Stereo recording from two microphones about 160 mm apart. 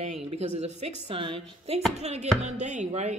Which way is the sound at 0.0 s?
45° right (ahead or behind).